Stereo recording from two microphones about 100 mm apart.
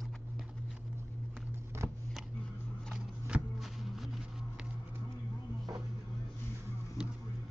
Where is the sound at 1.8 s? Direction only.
25° right (ahead or behind).